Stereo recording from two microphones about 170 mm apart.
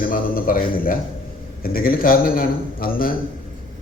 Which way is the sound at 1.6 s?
60° left (ahead or behind).